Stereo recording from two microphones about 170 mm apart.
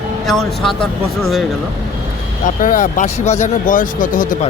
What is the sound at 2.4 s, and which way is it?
Speech, 50° left (ahead or behind).